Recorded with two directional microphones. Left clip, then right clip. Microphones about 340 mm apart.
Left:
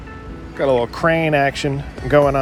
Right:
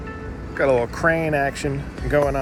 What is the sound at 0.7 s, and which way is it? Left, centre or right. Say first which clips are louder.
Speech: left 4 dB; centre.